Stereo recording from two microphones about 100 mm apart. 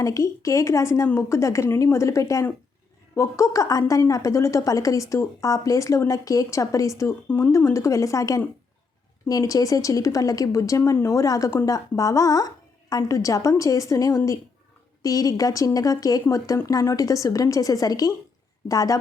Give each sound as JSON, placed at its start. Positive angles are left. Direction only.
{"t": 0.0, "sound": "a woman's voice", "side_deg": 30}
{"t": 7.3, "sound": "speech", "side_deg": 20}
{"t": 7.5, "sound": "a woman's voice", "side_deg": 30}